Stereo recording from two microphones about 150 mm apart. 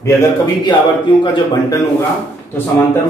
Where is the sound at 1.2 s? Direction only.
30° left (ahead or behind).